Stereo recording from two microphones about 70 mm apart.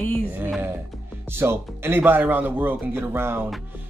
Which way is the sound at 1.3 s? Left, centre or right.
Right.